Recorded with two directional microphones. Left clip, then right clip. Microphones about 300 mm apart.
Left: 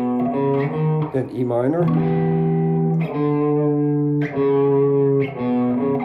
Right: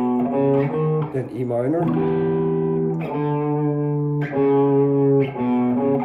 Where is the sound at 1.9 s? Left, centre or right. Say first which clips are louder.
Right 1 dB; centre.